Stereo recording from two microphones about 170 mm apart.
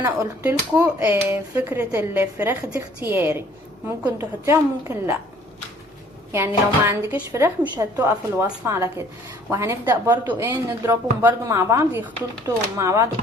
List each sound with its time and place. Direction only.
0.0 s speech: 15° right (ahead or behind)
6.3 s speech: 15° right (ahead or behind)